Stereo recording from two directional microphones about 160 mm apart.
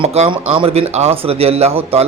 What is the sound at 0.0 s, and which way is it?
A man's voice, 35° right (ahead or behind).